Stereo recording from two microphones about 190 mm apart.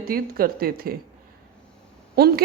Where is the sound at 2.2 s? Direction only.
55° right (ahead or behind).